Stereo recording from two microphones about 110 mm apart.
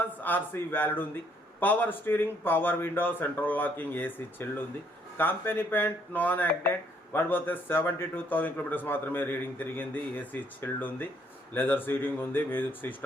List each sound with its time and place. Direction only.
0.0 s a man's voice: 15° left (ahead or behind)